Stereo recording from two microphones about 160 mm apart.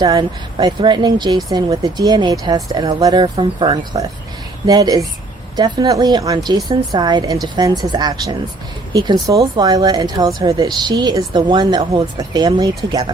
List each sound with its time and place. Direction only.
0.0 s speech: 25° right (ahead or behind)